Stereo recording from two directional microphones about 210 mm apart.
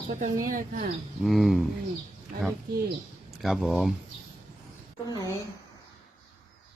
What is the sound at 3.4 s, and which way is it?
Speech, centre (ahead or behind).